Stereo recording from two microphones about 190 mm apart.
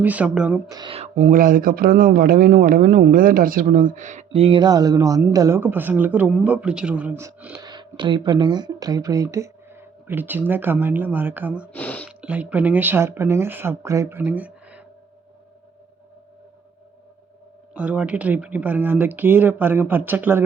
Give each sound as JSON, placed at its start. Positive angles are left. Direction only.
{"t": 0.0, "sound": "speech", "side_deg": -5}
{"t": 0.7, "sound": "speech", "side_deg": -25}
{"t": 7.6, "sound": "speech", "side_deg": -25}
{"t": 11.7, "sound": "speech", "side_deg": 5}
{"t": 12.0, "sound": "speech", "side_deg": -5}
{"t": 17.7, "sound": "speech", "side_deg": -5}